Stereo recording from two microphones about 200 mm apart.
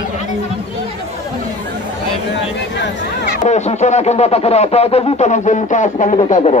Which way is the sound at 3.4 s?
35° left (ahead or behind).